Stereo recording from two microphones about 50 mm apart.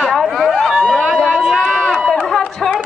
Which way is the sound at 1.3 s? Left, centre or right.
Centre.